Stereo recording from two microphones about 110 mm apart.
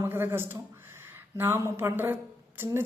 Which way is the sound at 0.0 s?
20° right (ahead or behind).